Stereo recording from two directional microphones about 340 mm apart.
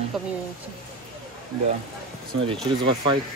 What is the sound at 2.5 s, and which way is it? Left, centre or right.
Speech, centre.